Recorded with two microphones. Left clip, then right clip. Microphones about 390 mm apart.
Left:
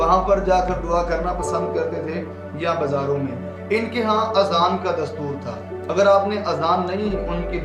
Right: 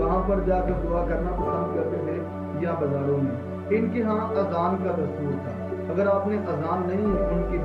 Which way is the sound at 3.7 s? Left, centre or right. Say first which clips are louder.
Left 5 dB; left.